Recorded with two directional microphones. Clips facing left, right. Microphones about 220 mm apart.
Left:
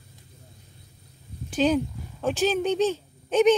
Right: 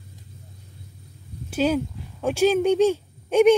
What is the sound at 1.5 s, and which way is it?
Speech, 5° right (ahead or behind).